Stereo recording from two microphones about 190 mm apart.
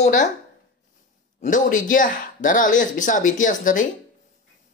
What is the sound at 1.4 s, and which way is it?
Speech, 45° left (ahead or behind).